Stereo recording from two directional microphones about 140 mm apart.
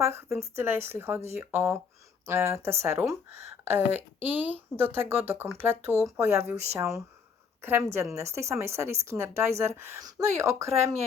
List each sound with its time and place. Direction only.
0.0 s a woman's voice: 15° right (ahead or behind)